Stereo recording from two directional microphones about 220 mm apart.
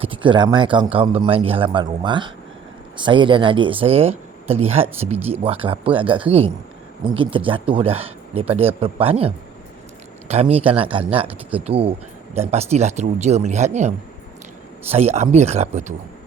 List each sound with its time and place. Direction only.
0.0 s speech: 25° right (ahead or behind)